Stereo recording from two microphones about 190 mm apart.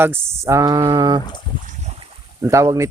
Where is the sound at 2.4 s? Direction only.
15° right (ahead or behind).